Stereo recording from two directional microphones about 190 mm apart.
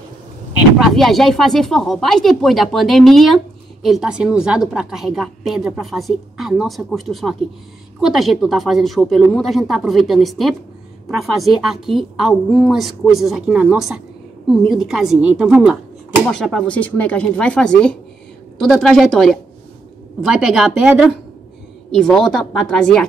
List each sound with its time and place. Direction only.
0.7 s a woman's voice: centre (ahead or behind)